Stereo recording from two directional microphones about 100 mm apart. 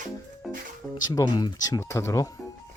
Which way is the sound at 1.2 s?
40° left (ahead or behind).